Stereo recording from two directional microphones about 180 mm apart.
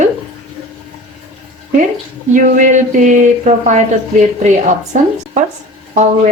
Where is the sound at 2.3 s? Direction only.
45° right (ahead or behind).